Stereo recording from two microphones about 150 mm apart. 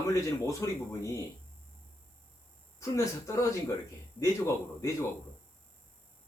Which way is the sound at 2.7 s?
20° left (ahead or behind).